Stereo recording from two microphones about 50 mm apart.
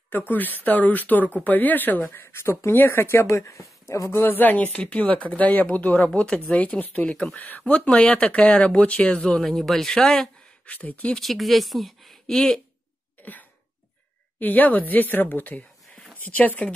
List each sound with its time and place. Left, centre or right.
0.3 s speech: left
3.3 s speech: left
4.2 s speech: left
6.5 s speech: left
9.4 s speech: centre
10.6 s speech: left
11.1 s speech: centre
13.2 s cough: left
14.4 s speech: left